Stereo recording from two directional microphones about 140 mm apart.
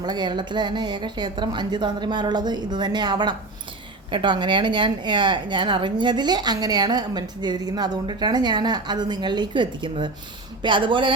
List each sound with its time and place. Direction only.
0.0 s a woman's voice: 30° right (ahead or behind)